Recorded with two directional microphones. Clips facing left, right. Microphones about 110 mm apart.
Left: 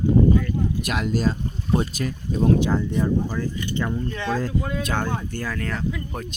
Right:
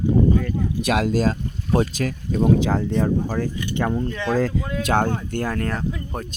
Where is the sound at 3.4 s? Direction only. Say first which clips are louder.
Right 2 dB; 60° right (ahead or behind).